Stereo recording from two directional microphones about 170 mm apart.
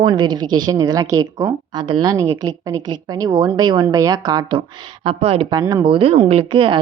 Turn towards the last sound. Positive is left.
turn(degrees=-30)  # may be behind; listen again after turning